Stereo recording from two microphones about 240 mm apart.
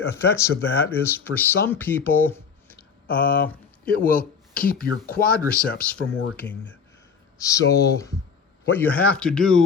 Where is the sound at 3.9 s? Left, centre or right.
Left.